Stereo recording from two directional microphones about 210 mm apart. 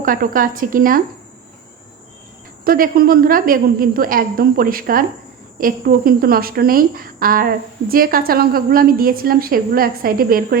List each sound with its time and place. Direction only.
0.0 s a woman's voice: 40° right (ahead or behind)
2.6 s a woman's voice: 45° right (ahead or behind)